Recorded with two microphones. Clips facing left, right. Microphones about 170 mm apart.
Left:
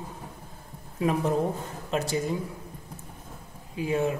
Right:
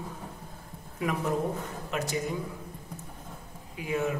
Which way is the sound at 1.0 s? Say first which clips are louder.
Left 4 dB; 30° left (ahead or behind).